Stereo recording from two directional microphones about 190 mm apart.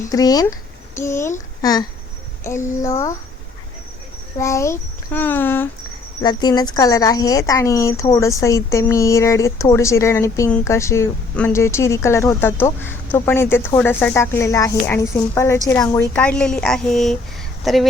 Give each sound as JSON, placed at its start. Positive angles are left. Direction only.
{"t": 0.1, "sound": "a woman's voice", "side_deg": 20}
{"t": 2.4, "sound": "a woman's voice", "side_deg": 15}
{"t": 4.4, "sound": "a woman's voice", "side_deg": 15}
{"t": 6.2, "sound": "a woman's voice", "side_deg": 20}